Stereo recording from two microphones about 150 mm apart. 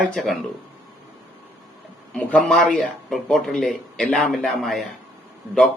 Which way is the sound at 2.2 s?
10° left (ahead or behind).